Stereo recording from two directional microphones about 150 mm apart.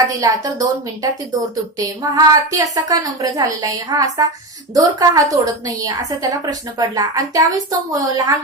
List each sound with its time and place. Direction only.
0.0 s a woman's voice: 25° right (ahead or behind)